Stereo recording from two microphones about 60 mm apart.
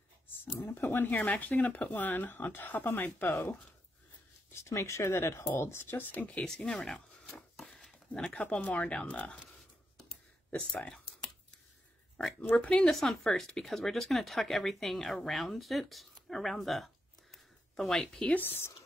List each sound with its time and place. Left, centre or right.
0.5 s speech: left
4.5 s speech: left
6.1 s speech: left
6.4 s a sound: centre
8.5 s speech: left
10.7 s speech: centre
12.2 s speech: centre
12.8 s speech: centre
16.2 s a sound: centre
18.3 s speech: left